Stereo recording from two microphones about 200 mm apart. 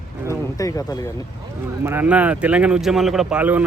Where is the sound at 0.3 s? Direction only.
15° left (ahead or behind).